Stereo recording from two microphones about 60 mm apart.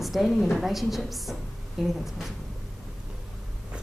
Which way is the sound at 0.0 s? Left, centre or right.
Centre.